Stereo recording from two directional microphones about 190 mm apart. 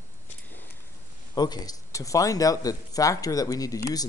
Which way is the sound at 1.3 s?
20° left (ahead or behind).